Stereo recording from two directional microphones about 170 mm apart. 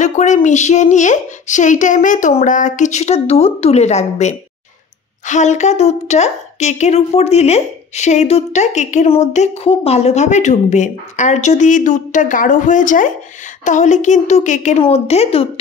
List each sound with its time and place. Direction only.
0.0 s a woman's voice: 45° left (ahead or behind)